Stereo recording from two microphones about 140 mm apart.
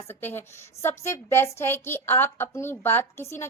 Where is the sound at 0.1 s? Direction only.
15° left (ahead or behind).